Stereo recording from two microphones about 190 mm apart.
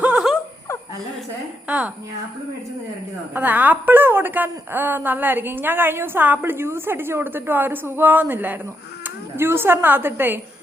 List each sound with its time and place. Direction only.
0.0 s a sound: 5° right (ahead or behind)
1.6 s a woman's voice: 5° right (ahead or behind)
3.3 s a woman's voice: 10° right (ahead or behind)